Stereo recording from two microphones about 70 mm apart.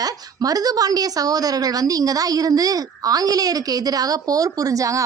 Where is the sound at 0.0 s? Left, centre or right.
Right.